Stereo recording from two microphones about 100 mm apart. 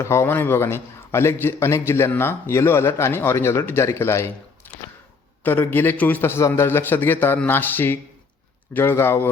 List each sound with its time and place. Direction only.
0.0 s a man's voice: 25° left (ahead or behind)
4.7 s a sound: 20° left (ahead or behind)
5.4 s a man's voice: 20° left (ahead or behind)